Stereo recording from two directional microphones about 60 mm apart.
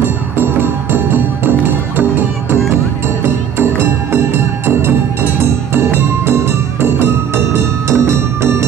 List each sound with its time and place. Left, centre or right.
6.8 s music: right